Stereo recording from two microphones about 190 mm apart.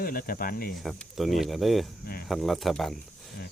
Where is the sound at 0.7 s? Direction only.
Centre (ahead or behind).